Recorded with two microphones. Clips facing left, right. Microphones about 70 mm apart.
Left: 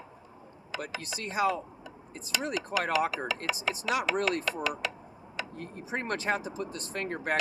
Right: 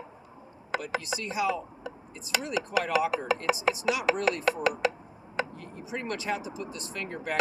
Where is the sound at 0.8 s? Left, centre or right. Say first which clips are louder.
Right 4 dB; left.